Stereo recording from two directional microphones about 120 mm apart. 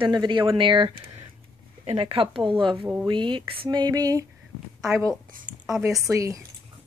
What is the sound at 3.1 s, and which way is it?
Speech, 40° right (ahead or behind).